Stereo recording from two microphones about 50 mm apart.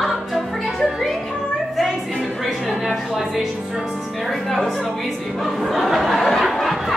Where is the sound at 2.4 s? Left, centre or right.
Centre.